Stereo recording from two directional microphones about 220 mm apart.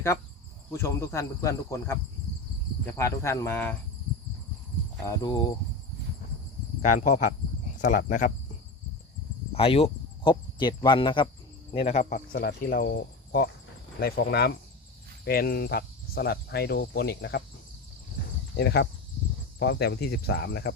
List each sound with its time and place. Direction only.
0.7 s speech: 10° left (ahead or behind)
5.0 s speech: 15° left (ahead or behind)
7.8 s speech: 35° left (ahead or behind)
9.5 s speech: 25° left (ahead or behind); by 17.4 s 45° left (ahead or behind)
18.5 s speech: 45° left (ahead or behind)